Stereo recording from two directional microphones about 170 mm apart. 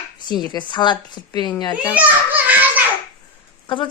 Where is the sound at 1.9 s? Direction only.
10° right (ahead or behind).